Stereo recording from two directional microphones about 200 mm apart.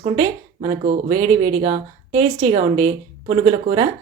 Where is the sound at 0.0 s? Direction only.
30° right (ahead or behind).